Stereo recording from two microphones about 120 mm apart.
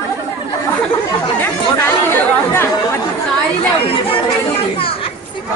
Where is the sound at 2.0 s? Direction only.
20° left (ahead or behind).